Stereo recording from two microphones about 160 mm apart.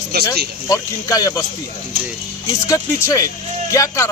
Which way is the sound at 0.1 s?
75° right (ahead or behind).